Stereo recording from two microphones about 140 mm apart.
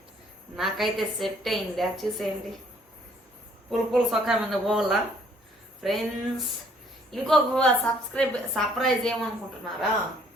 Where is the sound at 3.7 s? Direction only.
Centre (ahead or behind).